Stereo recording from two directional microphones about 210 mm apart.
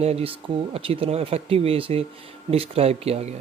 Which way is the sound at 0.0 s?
30° right (ahead or behind).